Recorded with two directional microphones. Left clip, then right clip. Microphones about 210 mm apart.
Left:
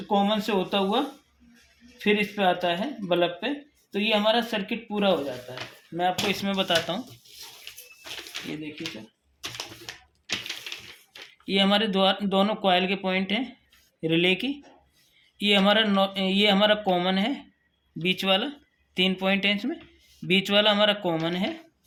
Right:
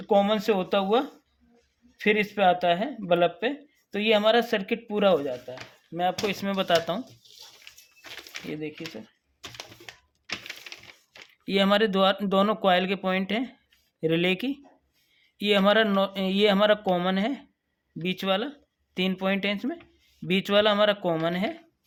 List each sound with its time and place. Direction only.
0.1 s speech: 55° right (ahead or behind)
9.6 s typewriter: 25° right (ahead or behind)
11.4 s speech: 45° right (ahead or behind)